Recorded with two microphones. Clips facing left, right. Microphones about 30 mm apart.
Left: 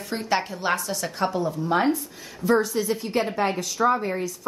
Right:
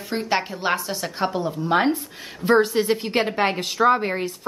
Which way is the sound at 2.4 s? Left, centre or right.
Right.